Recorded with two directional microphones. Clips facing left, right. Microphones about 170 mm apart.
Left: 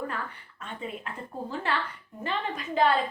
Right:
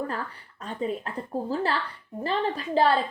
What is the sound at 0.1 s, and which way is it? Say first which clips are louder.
A woman's voice: right 3 dB; 35° right (ahead or behind).